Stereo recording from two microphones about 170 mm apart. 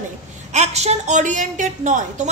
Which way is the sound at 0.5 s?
40° right (ahead or behind).